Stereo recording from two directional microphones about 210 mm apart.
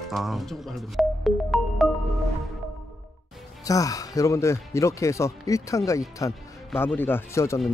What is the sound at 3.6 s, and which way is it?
Speech, 15° left (ahead or behind).